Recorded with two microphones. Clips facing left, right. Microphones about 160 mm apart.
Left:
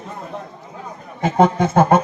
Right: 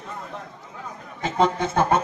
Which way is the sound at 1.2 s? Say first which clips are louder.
Left 6 dB; 50° left (ahead or behind).